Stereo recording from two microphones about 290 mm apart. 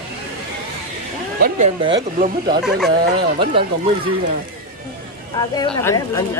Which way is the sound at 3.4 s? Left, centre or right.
Centre.